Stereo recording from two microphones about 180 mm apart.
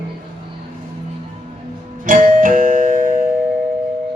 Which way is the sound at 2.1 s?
50° right (ahead or behind).